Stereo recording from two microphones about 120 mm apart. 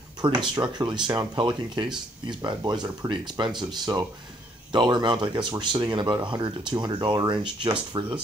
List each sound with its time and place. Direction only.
0.2 s speech: 45° right (ahead or behind)